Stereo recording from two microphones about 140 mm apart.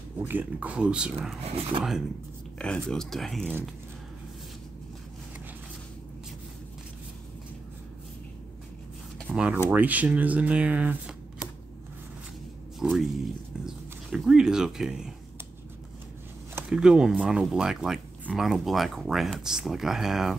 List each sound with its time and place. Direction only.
0.2 s speech: 10° right (ahead or behind)
1.4 s speech: 45° right (ahead or behind)
1.8 s speech: 5° right (ahead or behind)
9.3 s speech: 5° right (ahead or behind)
12.8 s speech: 5° right (ahead or behind)
16.5 s speech: 5° right (ahead or behind)